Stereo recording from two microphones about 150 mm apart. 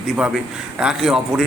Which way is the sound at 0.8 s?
5° right (ahead or behind).